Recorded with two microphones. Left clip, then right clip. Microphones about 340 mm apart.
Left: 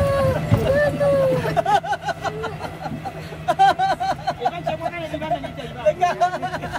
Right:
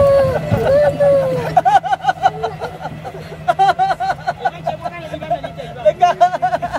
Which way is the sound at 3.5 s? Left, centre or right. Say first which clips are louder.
Right 3 dB; right.